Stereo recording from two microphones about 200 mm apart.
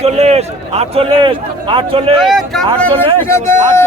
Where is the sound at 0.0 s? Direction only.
30° right (ahead or behind).